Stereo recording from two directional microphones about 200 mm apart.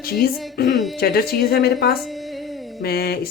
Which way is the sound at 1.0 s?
50° left (ahead or behind).